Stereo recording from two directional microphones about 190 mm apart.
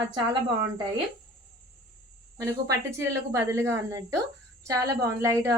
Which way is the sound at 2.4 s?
15° right (ahead or behind).